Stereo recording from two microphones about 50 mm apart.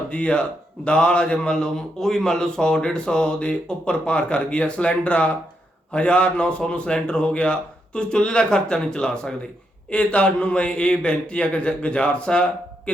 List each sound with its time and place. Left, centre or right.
0.1 s a man's voice: left